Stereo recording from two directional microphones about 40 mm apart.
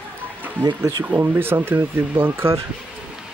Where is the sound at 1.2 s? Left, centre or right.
Right.